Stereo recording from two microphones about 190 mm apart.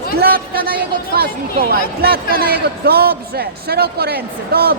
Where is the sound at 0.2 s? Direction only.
50° right (ahead or behind).